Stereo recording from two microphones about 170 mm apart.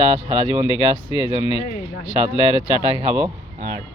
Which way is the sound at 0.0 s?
30° left (ahead or behind).